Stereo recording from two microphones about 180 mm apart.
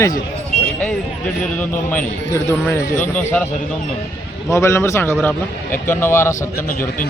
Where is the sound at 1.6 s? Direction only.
10° left (ahead or behind).